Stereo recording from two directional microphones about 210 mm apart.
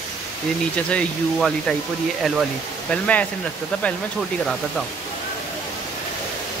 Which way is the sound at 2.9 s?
5° left (ahead or behind).